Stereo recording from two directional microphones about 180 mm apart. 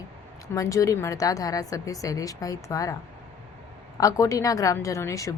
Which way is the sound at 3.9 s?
20° left (ahead or behind).